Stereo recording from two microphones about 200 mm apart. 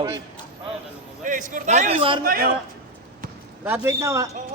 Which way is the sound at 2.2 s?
45° right (ahead or behind).